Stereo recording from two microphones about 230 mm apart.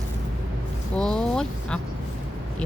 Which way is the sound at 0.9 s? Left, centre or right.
Centre.